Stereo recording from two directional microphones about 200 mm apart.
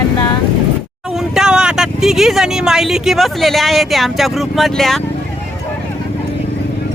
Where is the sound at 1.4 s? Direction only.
5° right (ahead or behind).